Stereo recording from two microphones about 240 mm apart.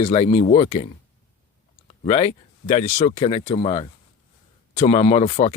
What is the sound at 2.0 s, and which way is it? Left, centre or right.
Speech, left.